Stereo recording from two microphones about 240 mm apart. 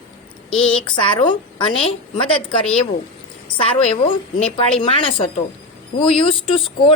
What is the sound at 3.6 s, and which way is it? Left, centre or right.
A woman's voice, left.